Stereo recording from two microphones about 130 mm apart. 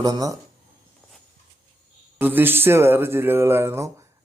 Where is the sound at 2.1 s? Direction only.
15° right (ahead or behind).